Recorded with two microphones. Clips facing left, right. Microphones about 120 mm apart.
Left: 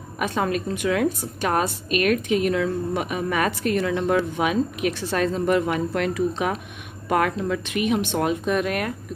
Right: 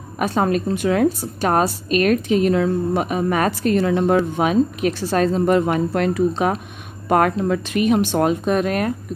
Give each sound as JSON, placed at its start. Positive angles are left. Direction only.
{"t": 0.2, "sound": "a woman's voice", "side_deg": -35}